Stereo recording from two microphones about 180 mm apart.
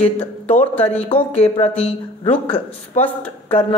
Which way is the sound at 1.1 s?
35° left (ahead or behind).